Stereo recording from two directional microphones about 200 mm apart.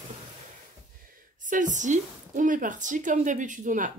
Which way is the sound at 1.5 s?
40° right (ahead or behind).